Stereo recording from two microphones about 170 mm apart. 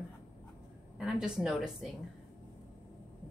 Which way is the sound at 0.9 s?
5° right (ahead or behind).